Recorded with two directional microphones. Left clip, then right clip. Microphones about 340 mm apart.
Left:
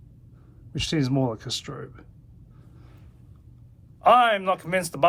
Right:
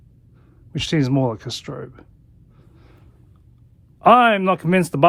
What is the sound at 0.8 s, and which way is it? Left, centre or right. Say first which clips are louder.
Speech: right 5 dB; right.